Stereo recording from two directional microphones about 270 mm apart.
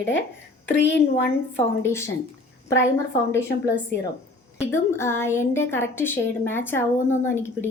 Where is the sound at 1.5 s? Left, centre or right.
Centre.